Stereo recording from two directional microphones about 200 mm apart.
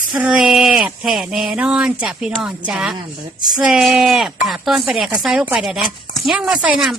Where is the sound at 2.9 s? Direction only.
20° right (ahead or behind).